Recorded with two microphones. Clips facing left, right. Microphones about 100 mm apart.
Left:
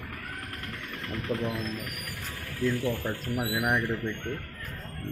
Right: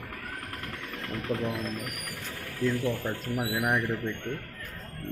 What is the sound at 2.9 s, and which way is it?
Speech, centre (ahead or behind).